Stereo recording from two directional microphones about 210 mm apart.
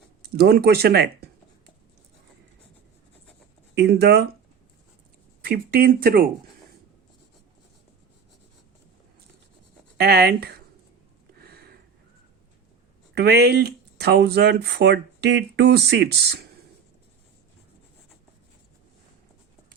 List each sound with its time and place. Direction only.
0.3 s speech: 50° right (ahead or behind)
3.8 s speech: 50° right (ahead or behind)
5.4 s speech: 45° right (ahead or behind)
10.0 s speech: 50° right (ahead or behind)
11.3 s a sound: 50° right (ahead or behind)
13.1 s speech: 50° right (ahead or behind)